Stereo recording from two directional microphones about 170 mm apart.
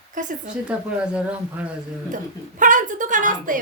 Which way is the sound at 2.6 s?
50° right (ahead or behind).